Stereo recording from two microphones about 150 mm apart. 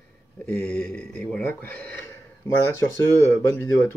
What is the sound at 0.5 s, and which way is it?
Speech, 5° left (ahead or behind).